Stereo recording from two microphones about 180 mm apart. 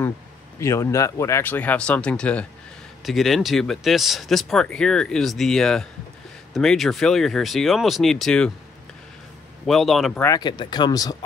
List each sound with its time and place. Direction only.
0.6 s speech: 15° left (ahead or behind)
9.7 s speech: centre (ahead or behind)
10.2 s speech: 20° left (ahead or behind)